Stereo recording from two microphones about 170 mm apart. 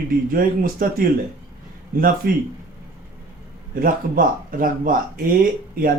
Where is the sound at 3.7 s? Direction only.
55° right (ahead or behind).